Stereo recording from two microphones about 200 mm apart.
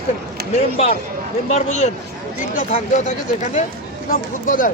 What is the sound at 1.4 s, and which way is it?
Speech, 35° left (ahead or behind).